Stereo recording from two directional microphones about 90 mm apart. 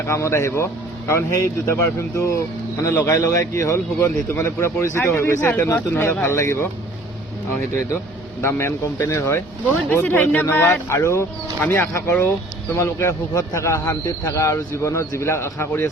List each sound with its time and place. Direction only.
0.1 s speech: 30° left (ahead or behind)
8.4 s speech: 30° left (ahead or behind)
9.9 s speech: 20° left (ahead or behind)